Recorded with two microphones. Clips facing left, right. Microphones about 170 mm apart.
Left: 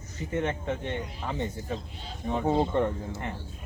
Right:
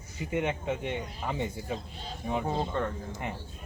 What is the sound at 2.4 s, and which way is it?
Speech, 20° left (ahead or behind).